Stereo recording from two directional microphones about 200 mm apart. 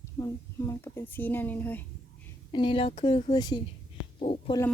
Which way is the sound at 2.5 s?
25° left (ahead or behind).